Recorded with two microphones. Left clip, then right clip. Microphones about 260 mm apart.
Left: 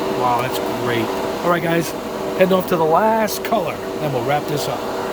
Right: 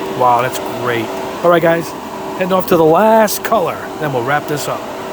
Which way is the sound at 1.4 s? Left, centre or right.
Right.